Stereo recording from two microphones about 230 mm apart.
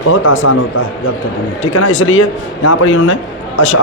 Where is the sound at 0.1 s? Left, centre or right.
Left.